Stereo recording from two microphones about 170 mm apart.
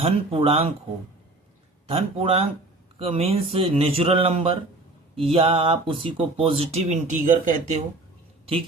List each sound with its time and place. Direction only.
0.0 s speech: 35° right (ahead or behind)
1.9 s speech: 35° right (ahead or behind)